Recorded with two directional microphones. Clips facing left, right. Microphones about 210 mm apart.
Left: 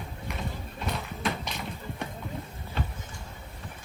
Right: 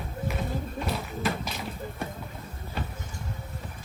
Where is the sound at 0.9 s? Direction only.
Centre (ahead or behind).